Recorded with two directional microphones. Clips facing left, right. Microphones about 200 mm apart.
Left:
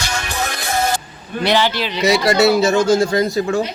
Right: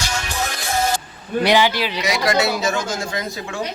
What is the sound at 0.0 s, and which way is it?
Music, 60° left (ahead or behind).